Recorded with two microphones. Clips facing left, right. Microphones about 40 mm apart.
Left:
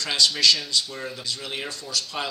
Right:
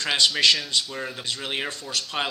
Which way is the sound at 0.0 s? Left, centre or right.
Right.